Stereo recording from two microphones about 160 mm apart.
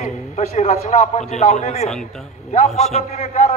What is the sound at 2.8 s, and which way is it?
Speech, 45° left (ahead or behind).